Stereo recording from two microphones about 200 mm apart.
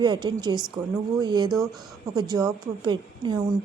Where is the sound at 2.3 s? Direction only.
20° right (ahead or behind).